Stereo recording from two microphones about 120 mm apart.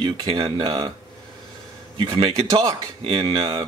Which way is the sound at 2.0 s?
45° right (ahead or behind).